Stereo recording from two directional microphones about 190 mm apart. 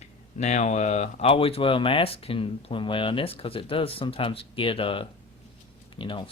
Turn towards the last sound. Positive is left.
turn(degrees=25)  # may be behind; listen again after turning